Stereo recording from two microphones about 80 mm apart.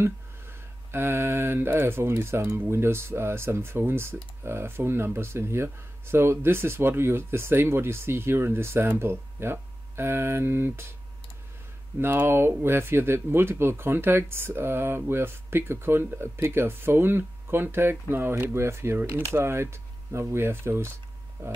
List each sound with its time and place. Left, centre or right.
0.0 s speech: right
12.0 s speech: right